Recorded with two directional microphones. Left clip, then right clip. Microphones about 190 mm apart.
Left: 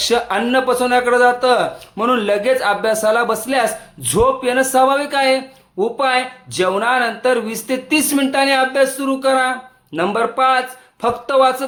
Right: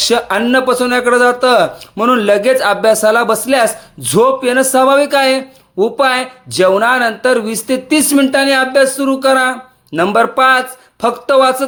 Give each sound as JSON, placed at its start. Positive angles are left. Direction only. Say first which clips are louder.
{"t": 0.0, "sound": "speech", "louder": "right 4 dB", "side_deg": -30}